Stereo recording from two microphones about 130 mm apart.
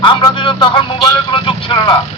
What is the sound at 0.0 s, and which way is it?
A man's voice, 40° left (ahead or behind).